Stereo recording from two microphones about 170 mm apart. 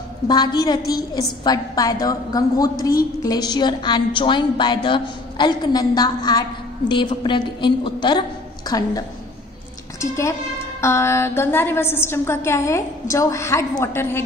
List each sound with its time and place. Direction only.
0.3 s a woman's voice: 25° left (ahead or behind)